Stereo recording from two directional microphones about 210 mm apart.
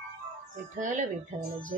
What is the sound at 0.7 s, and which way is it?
Speech, 35° right (ahead or behind).